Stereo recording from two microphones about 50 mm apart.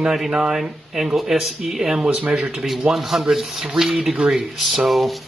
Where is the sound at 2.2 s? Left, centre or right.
Right.